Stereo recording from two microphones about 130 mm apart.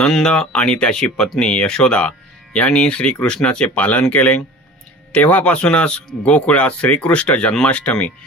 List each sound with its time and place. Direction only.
0.0 s speech: 5° left (ahead or behind)